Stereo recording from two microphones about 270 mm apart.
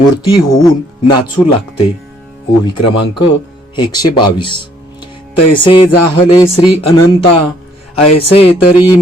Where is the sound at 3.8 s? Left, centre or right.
Centre.